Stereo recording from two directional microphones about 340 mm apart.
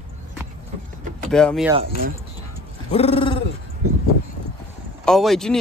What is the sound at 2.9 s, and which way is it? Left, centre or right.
Bird, centre.